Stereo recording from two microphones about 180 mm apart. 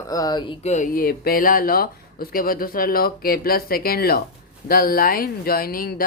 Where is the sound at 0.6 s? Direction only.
40° left (ahead or behind).